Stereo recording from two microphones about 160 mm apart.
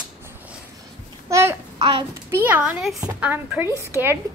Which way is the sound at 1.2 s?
20° right (ahead or behind).